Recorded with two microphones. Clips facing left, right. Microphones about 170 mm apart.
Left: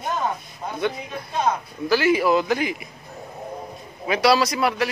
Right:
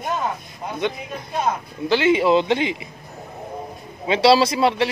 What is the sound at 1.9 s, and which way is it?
A man's voice, 25° right (ahead or behind).